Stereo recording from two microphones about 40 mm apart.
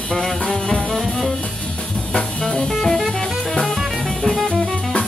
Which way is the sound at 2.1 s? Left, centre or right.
Centre.